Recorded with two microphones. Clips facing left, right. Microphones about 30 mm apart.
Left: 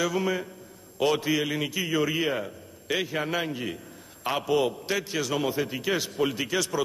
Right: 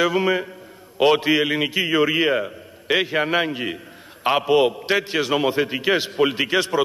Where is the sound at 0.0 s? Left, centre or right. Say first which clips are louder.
Right 7 dB; right.